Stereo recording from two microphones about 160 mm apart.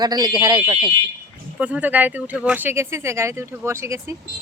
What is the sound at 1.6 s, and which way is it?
Speech, 10° right (ahead or behind).